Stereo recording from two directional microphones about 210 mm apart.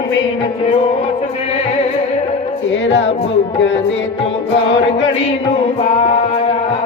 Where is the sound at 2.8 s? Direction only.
60° left (ahead or behind).